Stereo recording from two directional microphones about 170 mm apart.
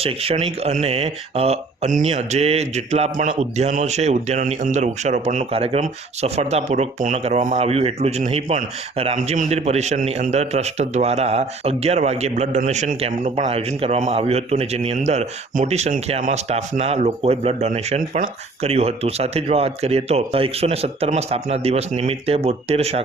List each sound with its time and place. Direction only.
0.0 s a man's voice: 35° right (ahead or behind)